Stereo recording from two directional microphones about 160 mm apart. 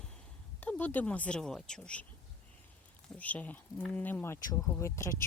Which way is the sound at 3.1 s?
10° left (ahead or behind).